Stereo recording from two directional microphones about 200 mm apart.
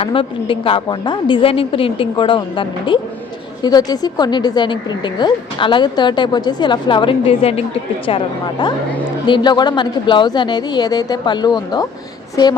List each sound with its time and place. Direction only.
0.0 s a woman's voice: 25° left (ahead or behind)